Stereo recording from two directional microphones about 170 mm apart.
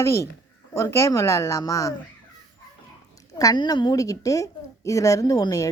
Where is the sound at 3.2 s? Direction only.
20° left (ahead or behind).